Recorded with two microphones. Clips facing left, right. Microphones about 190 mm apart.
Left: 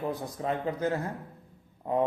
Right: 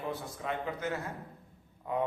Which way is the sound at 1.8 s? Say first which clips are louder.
Left 5 dB; 35° left (ahead or behind).